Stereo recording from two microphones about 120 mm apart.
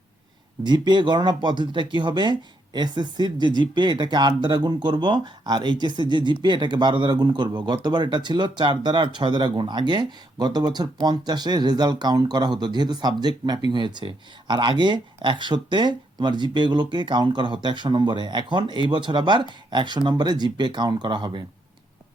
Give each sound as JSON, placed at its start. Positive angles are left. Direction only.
{"t": 0.6, "sound": "speech", "side_deg": -40}